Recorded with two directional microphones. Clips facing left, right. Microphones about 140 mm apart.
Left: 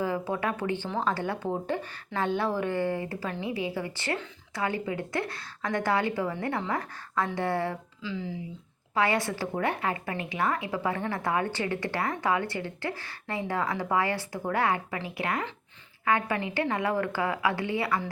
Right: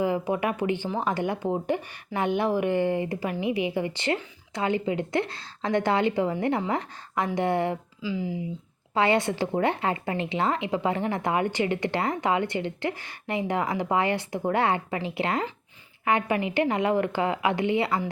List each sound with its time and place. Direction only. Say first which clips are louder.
0.0 s speech: right 4 dB; 15° right (ahead or behind)
1.1 s a woman's voice: right 4 dB; 15° right (ahead or behind)
9.0 s a woman's voice: right 4 dB; 25° right (ahead or behind)